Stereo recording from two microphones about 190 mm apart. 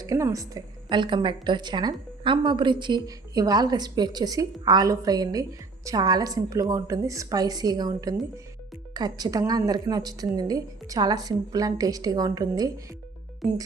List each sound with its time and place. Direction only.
0.0 s a woman's voice: 15° right (ahead or behind)